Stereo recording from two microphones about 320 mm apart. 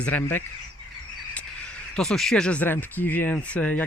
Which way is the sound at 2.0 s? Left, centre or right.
Centre.